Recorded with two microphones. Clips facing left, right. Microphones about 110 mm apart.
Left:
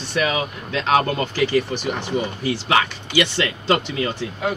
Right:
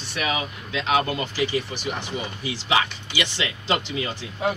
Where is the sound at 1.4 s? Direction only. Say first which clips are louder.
Left 8 dB; 55° left (ahead or behind).